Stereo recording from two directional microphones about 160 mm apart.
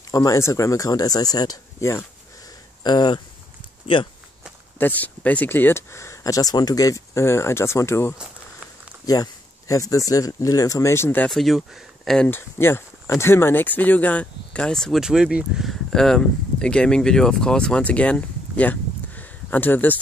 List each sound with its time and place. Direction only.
0.1 s speech: 20° left (ahead or behind)
4.7 s speech: 10° left (ahead or behind)
11.3 s speech: centre (ahead or behind)
12.3 s speech: 15° left (ahead or behind)